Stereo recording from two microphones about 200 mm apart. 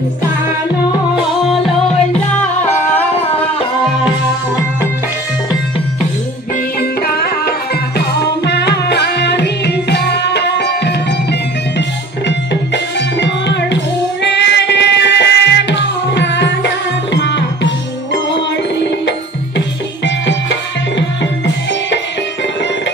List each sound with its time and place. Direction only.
2.3 s music: 10° left (ahead or behind)
6.8 s music: 50° left (ahead or behind)
12.3 s music: 60° left (ahead or behind)